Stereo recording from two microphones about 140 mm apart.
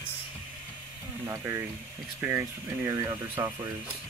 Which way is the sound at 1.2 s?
20° right (ahead or behind).